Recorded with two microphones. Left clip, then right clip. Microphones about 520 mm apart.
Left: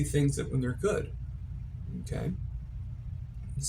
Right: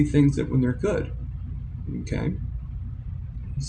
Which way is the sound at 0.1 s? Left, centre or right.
Left.